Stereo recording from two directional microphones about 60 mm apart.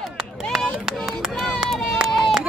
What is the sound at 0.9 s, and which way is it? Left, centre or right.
Run, centre.